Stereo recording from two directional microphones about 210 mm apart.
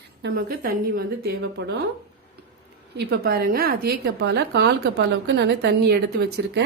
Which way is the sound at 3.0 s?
50° right (ahead or behind).